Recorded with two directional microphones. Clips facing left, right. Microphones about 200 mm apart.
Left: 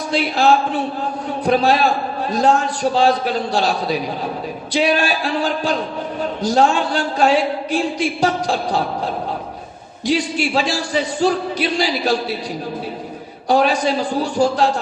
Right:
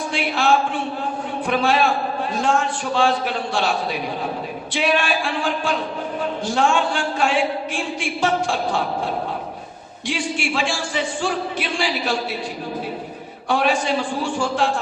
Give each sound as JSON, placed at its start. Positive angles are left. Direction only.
{"t": 0.1, "sound": "a man's voice", "side_deg": 40}
{"t": 10.1, "sound": "a man's voice", "side_deg": 40}
{"t": 13.5, "sound": "a man's voice", "side_deg": 40}